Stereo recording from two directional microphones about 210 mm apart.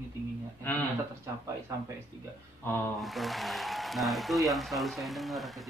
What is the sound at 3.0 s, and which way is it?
Speech, centre (ahead or behind).